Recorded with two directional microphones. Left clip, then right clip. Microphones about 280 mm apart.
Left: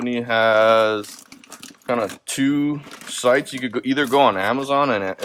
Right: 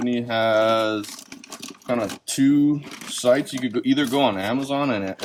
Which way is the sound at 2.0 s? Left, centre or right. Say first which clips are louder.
Left 1 dB; centre.